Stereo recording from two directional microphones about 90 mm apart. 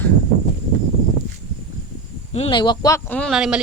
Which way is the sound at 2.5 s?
60° left (ahead or behind).